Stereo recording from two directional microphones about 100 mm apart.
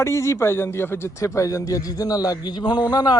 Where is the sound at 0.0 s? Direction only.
25° left (ahead or behind).